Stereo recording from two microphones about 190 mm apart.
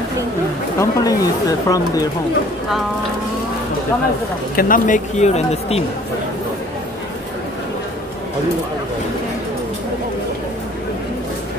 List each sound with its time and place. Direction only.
0.7 s speech: 20° left (ahead or behind)
4.6 s speech: 45° left (ahead or behind)